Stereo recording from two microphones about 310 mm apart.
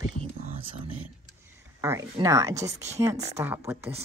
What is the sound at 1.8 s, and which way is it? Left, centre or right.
A woman's voice, centre.